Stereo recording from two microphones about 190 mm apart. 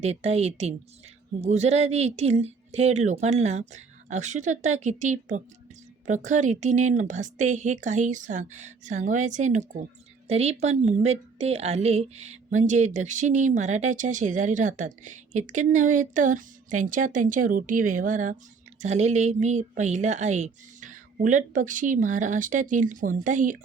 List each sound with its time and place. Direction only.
0.0 s a woman's voice: 35° right (ahead or behind)